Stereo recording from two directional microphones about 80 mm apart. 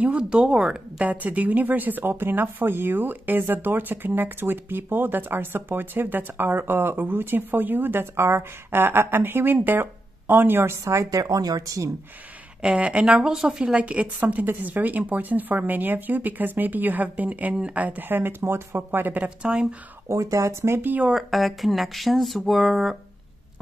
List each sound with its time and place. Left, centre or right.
0.0 s a woman's voice: centre; by 10.8 s right
10.8 s a woman's voice: right
12.6 s a woman's voice: centre
20.1 s speech: right
20.8 s a woman's voice: right
21.1 s speech: centre